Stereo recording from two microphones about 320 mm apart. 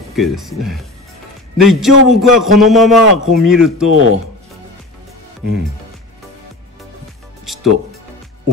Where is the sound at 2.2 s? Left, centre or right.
Centre.